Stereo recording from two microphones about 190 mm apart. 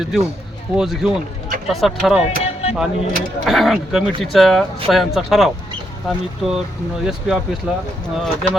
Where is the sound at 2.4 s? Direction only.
30° left (ahead or behind).